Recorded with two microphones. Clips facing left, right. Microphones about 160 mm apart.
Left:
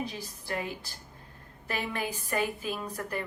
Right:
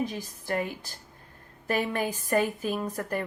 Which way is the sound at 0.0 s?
50° right (ahead or behind).